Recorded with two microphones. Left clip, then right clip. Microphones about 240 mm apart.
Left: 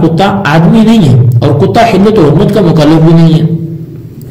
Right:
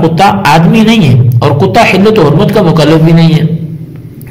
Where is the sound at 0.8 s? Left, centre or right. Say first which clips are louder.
Even; right.